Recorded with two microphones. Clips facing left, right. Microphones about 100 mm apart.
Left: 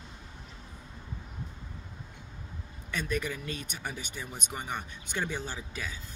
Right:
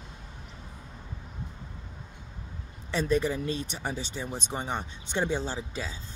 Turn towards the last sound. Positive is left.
turn(degrees=-25)  # may be behind; listen again after turning